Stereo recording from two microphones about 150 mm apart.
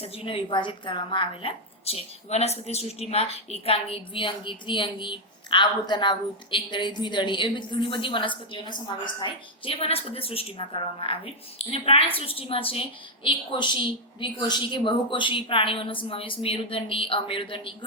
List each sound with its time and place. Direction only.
0.0 s a woman's voice: 40° left (ahead or behind)